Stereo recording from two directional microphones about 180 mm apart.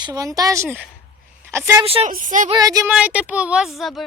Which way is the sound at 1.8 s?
30° right (ahead or behind).